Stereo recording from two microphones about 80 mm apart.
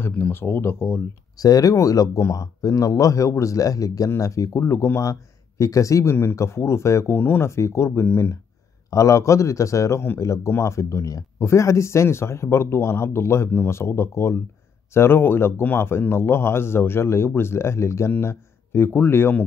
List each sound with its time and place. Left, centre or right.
0.1 s speech: left
1.3 s speech: left